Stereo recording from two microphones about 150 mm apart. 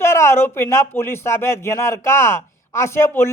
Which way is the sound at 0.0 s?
15° left (ahead or behind).